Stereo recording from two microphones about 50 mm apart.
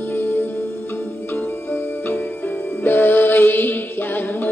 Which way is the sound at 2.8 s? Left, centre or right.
Left.